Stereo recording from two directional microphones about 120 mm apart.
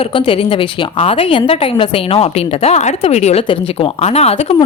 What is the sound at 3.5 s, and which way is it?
Speech, 50° left (ahead or behind).